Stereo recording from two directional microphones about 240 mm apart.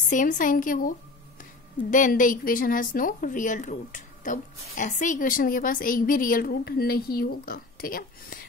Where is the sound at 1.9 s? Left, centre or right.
Left.